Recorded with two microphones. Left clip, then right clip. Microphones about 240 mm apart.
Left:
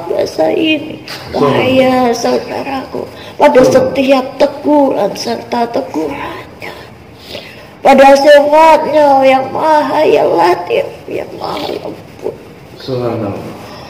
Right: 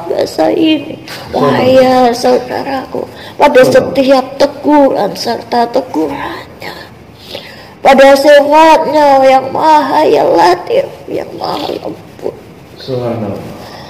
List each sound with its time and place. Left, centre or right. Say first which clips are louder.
0.1 s a woman's voice: right 1 dB; right
7.8 s a man's voice: even; right
11.5 s speech: right 1 dB; centre